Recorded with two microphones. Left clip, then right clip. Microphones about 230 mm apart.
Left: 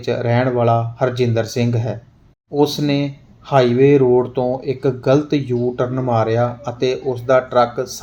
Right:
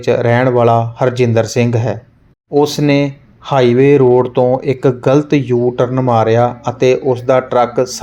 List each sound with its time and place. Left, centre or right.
0.0 s speech: right